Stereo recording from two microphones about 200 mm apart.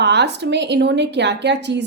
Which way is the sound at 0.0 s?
60° right (ahead or behind).